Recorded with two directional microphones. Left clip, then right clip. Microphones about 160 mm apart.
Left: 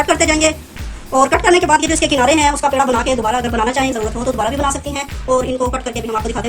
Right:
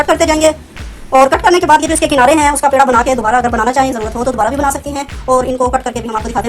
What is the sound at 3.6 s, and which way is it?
A woman's voice, 20° right (ahead or behind).